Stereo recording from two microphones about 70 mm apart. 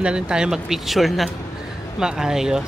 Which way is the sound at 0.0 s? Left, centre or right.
Centre.